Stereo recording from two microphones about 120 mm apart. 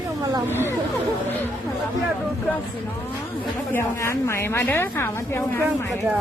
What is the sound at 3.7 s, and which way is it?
A woman's voice, 20° left (ahead or behind).